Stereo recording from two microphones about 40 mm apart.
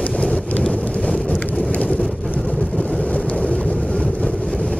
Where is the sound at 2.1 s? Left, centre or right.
Left.